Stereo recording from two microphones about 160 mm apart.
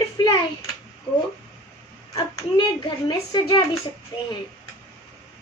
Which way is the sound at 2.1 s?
30° left (ahead or behind).